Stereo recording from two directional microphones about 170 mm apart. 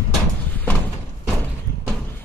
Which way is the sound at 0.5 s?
10° left (ahead or behind).